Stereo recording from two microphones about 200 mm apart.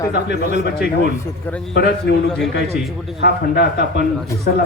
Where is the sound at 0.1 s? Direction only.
55° left (ahead or behind).